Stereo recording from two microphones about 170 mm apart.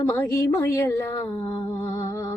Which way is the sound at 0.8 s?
15° left (ahead or behind).